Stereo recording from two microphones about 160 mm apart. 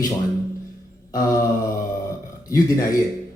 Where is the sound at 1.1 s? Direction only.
20° left (ahead or behind).